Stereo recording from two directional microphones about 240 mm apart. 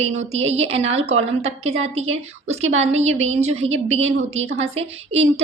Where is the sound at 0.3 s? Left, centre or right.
Right.